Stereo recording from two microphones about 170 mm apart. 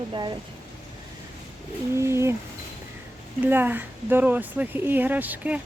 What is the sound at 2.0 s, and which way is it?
Speech, 15° right (ahead or behind).